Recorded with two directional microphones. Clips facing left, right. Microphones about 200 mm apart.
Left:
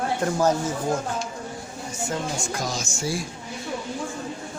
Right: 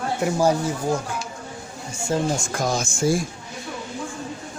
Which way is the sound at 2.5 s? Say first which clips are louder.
Right 5 dB; 55° right (ahead or behind).